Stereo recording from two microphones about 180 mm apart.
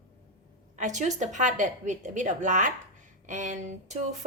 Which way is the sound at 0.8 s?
40° right (ahead or behind).